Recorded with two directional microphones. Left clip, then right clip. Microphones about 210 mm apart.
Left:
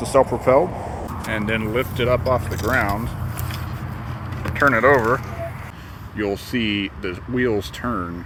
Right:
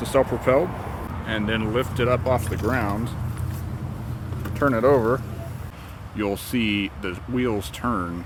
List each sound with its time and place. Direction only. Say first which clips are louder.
0.1 s speech: left 4 dB; 15° right (ahead or behind); by 3.0 s 35° right (ahead or behind)
4.6 s speech: left 4 dB; 25° right (ahead or behind)
6.1 s speech: left 2 dB; 20° right (ahead or behind)